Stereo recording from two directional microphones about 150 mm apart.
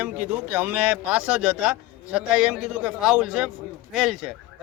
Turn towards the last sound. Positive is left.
turn(degrees=-5)  # may be behind; listen again after turning